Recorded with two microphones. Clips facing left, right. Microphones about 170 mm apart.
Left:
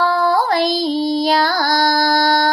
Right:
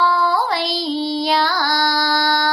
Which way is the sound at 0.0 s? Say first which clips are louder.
Left 2 dB; 45° left (ahead or behind).